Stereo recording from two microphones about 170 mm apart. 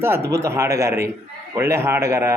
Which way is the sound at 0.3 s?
15° right (ahead or behind).